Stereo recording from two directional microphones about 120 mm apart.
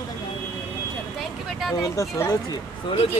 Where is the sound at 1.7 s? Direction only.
25° left (ahead or behind).